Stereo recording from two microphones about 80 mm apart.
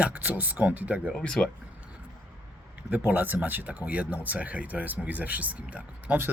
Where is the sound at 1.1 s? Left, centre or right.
Centre.